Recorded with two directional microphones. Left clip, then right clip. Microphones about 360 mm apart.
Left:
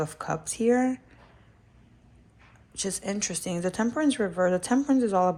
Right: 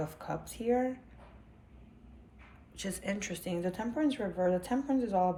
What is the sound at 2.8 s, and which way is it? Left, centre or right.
Speech, centre.